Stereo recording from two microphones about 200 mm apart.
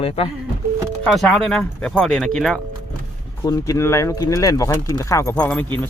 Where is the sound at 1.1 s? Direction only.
Centre (ahead or behind).